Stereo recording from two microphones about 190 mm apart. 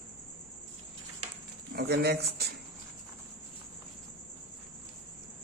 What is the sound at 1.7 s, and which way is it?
Speech, 55° right (ahead or behind).